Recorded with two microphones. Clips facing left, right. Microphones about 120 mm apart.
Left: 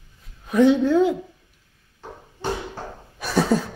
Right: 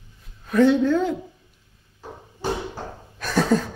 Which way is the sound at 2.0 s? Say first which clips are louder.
Right 1 dB; 5° right (ahead or behind).